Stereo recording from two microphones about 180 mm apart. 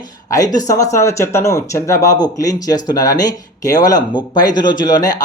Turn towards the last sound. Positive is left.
turn(degrees=20)  # may be behind; listen again after turning